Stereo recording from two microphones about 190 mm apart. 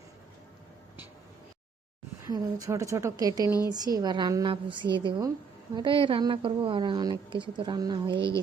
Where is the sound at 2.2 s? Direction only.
20° right (ahead or behind).